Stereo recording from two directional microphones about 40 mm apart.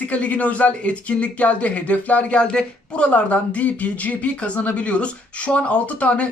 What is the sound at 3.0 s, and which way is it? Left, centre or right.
Speech, left.